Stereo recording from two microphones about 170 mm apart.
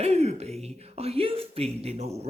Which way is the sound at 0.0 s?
40° right (ahead or behind).